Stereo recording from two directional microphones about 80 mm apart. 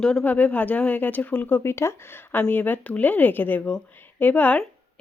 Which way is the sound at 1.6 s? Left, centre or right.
Left.